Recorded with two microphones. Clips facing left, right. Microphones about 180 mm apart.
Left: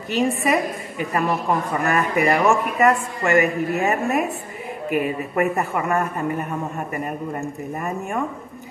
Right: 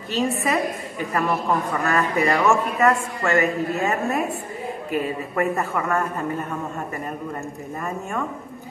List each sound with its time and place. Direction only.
0.1 s a man's voice: 15° left (ahead or behind)
7.8 s a man's voice: 15° left (ahead or behind)